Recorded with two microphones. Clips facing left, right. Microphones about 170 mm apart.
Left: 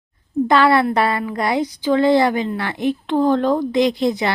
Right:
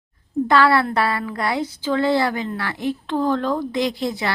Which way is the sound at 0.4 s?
20° left (ahead or behind).